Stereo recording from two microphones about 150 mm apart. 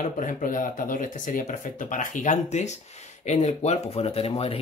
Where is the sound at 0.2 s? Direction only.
60° left (ahead or behind).